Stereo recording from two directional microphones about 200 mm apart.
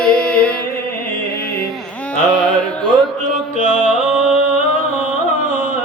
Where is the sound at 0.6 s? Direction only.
45° left (ahead or behind).